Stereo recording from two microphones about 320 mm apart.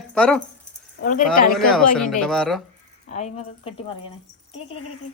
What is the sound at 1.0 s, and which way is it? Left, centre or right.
Speech, left.